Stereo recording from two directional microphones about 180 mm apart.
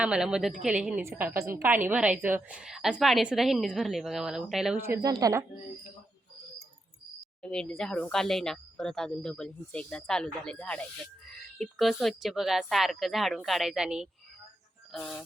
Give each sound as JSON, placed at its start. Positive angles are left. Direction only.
{"t": 0.0, "sound": "a woman's voice", "side_deg": -5}
{"t": 4.8, "sound": "speech", "side_deg": -15}
{"t": 7.4, "sound": "a woman's voice", "side_deg": 5}